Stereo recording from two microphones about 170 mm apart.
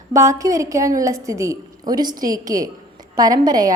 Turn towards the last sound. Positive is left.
turn(degrees=-20)  # may be behind; listen again after turning